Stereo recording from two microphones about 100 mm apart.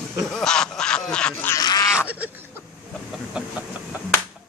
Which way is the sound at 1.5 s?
40° left (ahead or behind).